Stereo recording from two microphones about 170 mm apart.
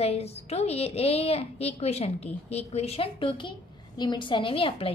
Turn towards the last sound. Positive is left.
turn(degrees=35)  # may be behind; listen again after turning